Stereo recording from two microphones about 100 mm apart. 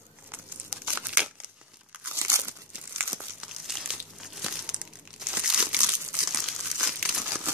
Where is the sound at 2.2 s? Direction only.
30° right (ahead or behind).